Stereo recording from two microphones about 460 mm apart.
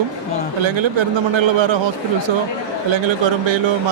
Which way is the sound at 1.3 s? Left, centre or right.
Right.